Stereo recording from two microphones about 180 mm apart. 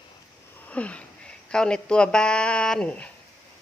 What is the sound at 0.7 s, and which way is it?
Wheeze, 5° left (ahead or behind).